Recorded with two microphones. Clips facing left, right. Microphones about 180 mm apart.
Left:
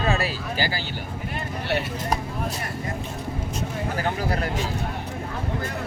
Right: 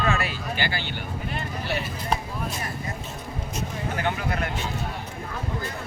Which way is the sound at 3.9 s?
35° left (ahead or behind).